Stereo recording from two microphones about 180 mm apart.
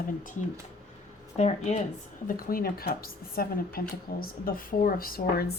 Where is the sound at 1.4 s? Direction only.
40° left (ahead or behind).